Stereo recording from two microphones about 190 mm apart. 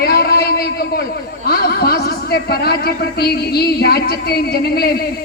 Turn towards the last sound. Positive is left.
turn(degrees=55)  # may be behind; listen again after turning